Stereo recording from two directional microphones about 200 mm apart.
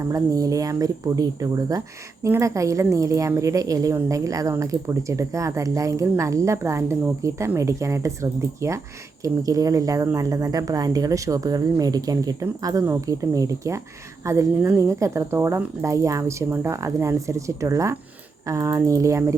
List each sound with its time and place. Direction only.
0.0 s a woman's voice: 15° right (ahead or behind)